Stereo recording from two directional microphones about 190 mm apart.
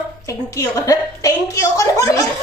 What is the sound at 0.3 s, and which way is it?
A woman's voice, 15° left (ahead or behind).